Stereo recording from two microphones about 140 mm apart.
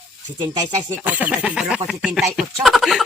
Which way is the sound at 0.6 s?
60° right (ahead or behind).